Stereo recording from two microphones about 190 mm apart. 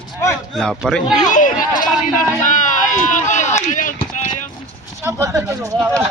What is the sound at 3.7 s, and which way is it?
Clip-clop, 45° left (ahead or behind).